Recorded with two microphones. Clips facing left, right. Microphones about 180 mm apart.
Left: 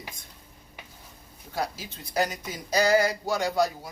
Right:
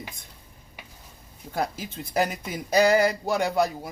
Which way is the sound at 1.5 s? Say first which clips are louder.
Right 3 dB; 50° right (ahead or behind).